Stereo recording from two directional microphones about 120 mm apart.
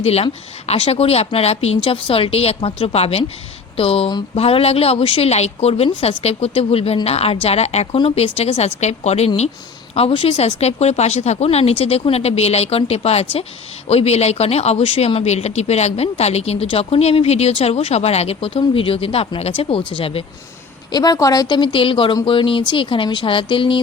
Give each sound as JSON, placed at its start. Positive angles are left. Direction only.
{"t": 0.0, "sound": "speech", "side_deg": 60}
{"t": 5.3, "sound": "speech", "side_deg": 60}
{"t": 7.9, "sound": "speech", "side_deg": 55}
{"t": 9.9, "sound": "speech", "side_deg": 50}
{"t": 20.9, "sound": "speech", "side_deg": 35}